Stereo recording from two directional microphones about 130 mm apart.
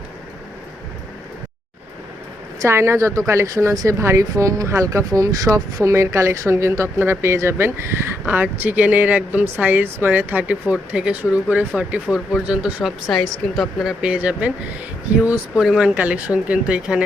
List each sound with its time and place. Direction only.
2.6 s speech: 20° right (ahead or behind)